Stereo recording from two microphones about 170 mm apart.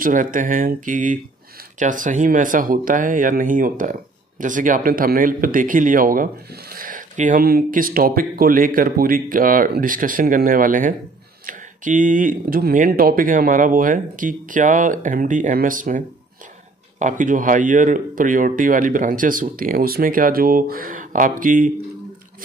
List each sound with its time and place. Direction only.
0.0 s speech: 50° right (ahead or behind)
17.0 s speech: 50° right (ahead or behind)